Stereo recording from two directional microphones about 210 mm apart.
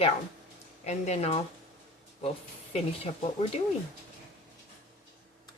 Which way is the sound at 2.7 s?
30° left (ahead or behind).